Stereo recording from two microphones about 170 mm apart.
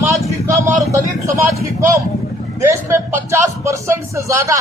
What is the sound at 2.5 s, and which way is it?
A man's voice, 15° right (ahead or behind).